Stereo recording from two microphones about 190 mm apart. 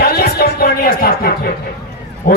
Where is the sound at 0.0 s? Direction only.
55° left (ahead or behind).